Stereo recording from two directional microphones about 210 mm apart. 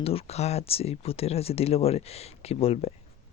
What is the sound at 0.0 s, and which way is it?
Speech, 30° left (ahead or behind).